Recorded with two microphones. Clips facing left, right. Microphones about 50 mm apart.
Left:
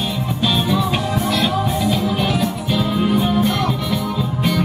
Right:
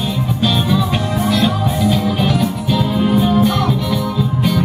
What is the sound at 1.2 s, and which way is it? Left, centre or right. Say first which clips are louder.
Music: right 4 dB; centre.